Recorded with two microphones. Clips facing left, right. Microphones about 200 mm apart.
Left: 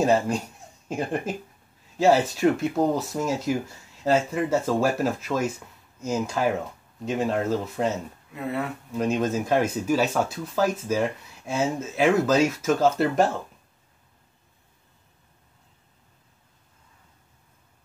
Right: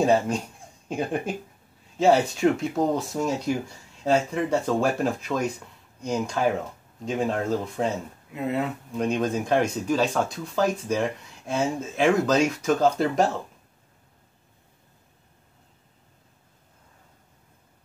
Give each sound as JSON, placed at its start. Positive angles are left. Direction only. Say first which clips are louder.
{"t": 0.0, "sound": "speech", "louder": "even", "side_deg": 0}
{"t": 8.3, "sound": "speech", "louder": "right 3 dB", "side_deg": -20}
{"t": 8.9, "sound": "speech", "louder": "left 1 dB", "side_deg": 5}